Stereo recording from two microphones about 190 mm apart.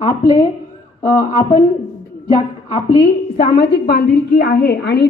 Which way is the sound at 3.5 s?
60° left (ahead or behind).